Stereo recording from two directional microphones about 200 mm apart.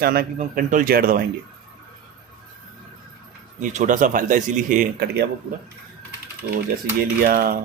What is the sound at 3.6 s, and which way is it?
A man's voice, 40° right (ahead or behind).